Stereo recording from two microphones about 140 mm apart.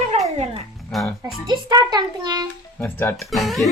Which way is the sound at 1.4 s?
30° right (ahead or behind).